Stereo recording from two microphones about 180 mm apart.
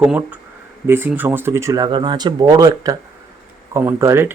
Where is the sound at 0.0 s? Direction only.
10° right (ahead or behind).